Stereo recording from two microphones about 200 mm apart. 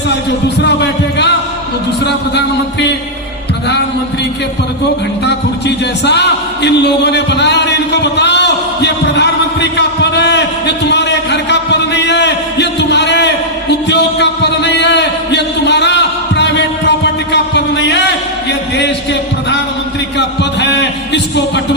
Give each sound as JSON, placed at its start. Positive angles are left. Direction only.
{"t": 0.6, "sound": "music", "side_deg": 60}
{"t": 5.2, "sound": "music", "side_deg": 60}
{"t": 17.3, "sound": "a sound", "side_deg": 60}
{"t": 20.1, "sound": "music", "side_deg": 60}